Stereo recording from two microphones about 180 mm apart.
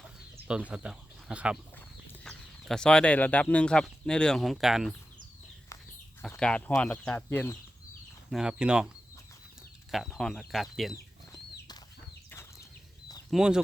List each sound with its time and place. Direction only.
0.7 s speech: 5° right (ahead or behind)
6.3 s speech: 5° left (ahead or behind)
8.3 s speech: 5° right (ahead or behind)
9.9 s speech: centre (ahead or behind)
12.3 s bird flight: 15° left (ahead or behind)
13.3 s speech: 5° right (ahead or behind)